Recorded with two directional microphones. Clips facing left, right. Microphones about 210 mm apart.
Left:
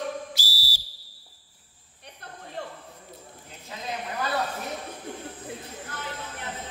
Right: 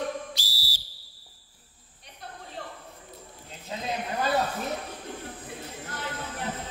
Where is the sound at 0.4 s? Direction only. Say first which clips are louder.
Left 3 dB; 10° left (ahead or behind).